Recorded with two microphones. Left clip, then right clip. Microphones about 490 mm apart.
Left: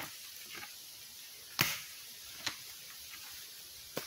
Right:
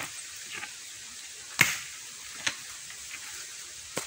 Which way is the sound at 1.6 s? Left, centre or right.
Left.